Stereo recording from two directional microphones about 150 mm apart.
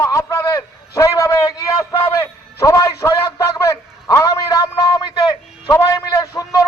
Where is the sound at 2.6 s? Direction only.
20° left (ahead or behind).